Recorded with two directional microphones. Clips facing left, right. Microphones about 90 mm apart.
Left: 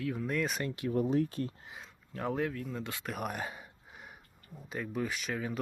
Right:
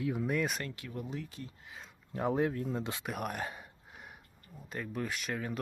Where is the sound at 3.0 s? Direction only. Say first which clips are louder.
Even; centre (ahead or behind).